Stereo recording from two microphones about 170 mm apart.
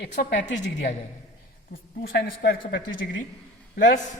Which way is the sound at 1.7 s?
60° left (ahead or behind).